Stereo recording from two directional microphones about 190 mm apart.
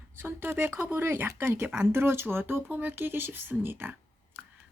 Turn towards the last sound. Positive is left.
turn(degrees=-10)  # may be behind; listen again after turning